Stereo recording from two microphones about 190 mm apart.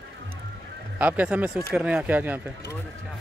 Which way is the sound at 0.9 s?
5° right (ahead or behind).